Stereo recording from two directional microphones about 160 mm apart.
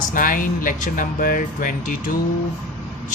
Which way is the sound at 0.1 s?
60° left (ahead or behind).